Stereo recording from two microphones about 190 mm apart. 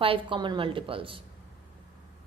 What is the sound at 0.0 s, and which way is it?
A woman's voice, 25° right (ahead or behind).